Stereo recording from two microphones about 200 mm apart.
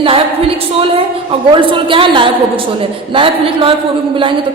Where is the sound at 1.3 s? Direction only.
25° right (ahead or behind).